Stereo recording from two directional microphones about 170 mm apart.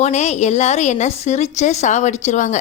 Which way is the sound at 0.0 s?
40° left (ahead or behind).